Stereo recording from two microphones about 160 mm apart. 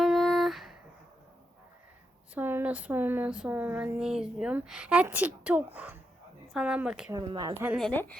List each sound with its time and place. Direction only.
0.0 s a sound: centre (ahead or behind)
2.3 s speech: 15° right (ahead or behind)
7.1 s speech: 25° right (ahead or behind)
7.5 s speech: 15° right (ahead or behind)
7.8 s speech: 5° left (ahead or behind)